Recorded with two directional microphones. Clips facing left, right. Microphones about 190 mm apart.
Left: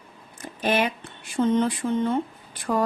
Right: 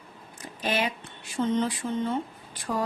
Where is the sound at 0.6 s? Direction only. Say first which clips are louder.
Left 5 dB; 55° left (ahead or behind).